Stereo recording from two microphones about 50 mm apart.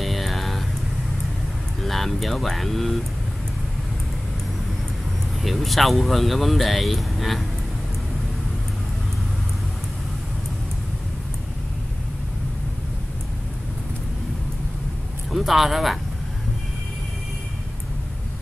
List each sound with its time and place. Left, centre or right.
0.0 s a sound: centre
1.8 s speech: centre
5.4 s speech: centre
15.3 s speech: centre